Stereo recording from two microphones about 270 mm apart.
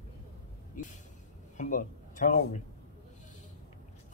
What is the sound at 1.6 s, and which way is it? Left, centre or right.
Speech, left.